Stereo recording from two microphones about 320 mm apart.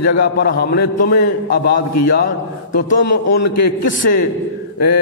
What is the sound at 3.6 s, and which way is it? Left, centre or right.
Speech, left.